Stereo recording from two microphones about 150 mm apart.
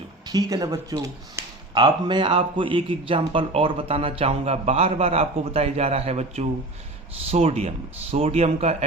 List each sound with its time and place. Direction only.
0.3 s speech: 25° right (ahead or behind); by 8.7 s 45° right (ahead or behind)